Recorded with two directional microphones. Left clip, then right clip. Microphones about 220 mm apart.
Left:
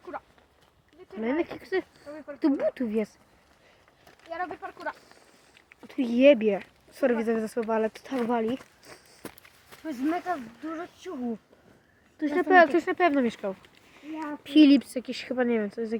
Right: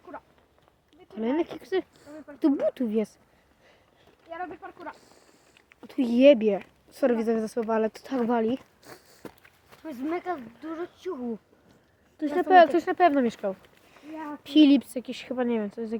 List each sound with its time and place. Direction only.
0.1 s dog: 60° left (ahead or behind)
1.1 s speech: 15° right (ahead or behind)
4.3 s speech: 60° left (ahead or behind)
5.8 s speech: 15° right (ahead or behind)
9.2 s walk: 15° left (ahead or behind)
9.8 s speech: 45° right (ahead or behind)
12.1 s speech: 5° right (ahead or behind)